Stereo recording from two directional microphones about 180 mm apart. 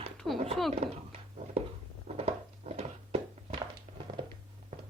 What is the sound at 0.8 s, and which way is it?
Speech, 35° right (ahead or behind).